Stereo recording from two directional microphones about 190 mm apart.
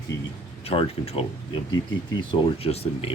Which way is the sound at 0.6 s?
30° left (ahead or behind).